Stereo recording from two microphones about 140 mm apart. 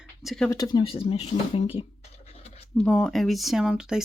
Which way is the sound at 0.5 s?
25° left (ahead or behind).